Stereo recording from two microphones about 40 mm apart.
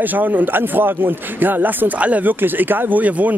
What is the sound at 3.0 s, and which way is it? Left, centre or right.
Speech, right.